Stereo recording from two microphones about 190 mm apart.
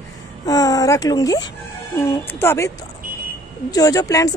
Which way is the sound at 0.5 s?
20° left (ahead or behind).